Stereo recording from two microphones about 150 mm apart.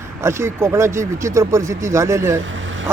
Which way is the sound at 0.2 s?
20° right (ahead or behind).